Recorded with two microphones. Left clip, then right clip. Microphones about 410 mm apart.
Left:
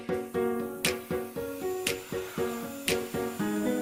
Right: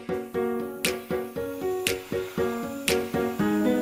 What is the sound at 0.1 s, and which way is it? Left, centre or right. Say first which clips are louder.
Music: right 2 dB; centre.